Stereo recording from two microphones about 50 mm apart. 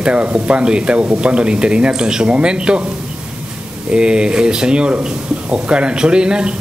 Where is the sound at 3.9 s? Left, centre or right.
Centre.